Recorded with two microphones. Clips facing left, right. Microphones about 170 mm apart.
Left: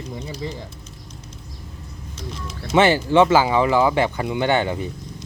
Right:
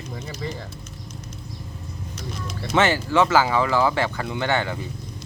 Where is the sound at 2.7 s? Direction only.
10° left (ahead or behind).